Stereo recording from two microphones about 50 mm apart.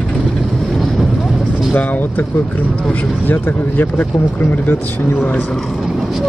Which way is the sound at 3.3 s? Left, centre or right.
Left.